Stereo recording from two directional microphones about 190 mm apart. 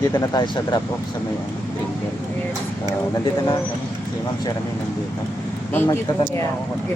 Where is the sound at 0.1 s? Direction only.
20° left (ahead or behind).